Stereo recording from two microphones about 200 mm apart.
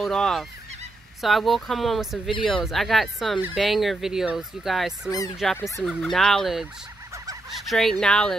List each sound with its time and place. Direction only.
0.0 s fowl: centre (ahead or behind)